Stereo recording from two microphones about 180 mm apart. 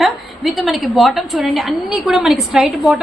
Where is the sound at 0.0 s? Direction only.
Centre (ahead or behind).